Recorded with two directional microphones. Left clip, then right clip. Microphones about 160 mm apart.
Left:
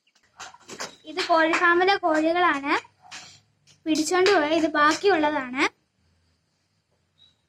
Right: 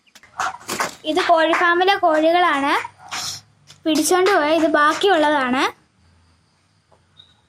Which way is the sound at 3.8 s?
30° right (ahead or behind).